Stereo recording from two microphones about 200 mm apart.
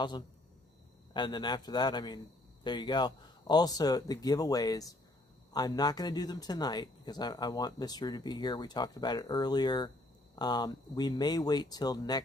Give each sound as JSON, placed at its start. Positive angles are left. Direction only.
{"t": 1.1, "sound": "speech", "side_deg": 20}